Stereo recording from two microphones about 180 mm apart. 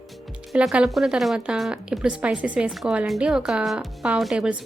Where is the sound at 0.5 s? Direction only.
5° right (ahead or behind).